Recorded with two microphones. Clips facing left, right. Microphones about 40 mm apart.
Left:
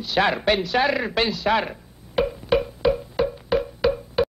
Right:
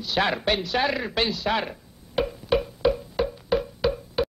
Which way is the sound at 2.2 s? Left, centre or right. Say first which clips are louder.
Left 3 dB; centre.